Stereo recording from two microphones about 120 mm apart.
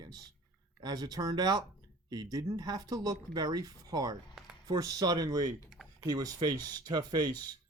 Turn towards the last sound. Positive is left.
turn(degrees=-35)  # may be behind; listen again after turning